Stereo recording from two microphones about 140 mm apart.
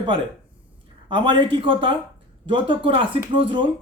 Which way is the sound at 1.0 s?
35° right (ahead or behind).